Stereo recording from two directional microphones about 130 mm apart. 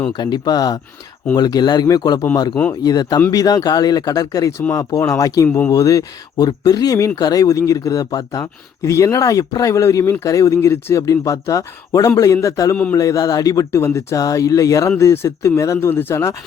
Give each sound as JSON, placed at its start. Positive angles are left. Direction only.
{"t": 0.1, "sound": "a man's voice", "side_deg": 35}
{"t": 12.7, "sound": "a man's voice", "side_deg": 10}
{"t": 13.0, "sound": "speech", "side_deg": 25}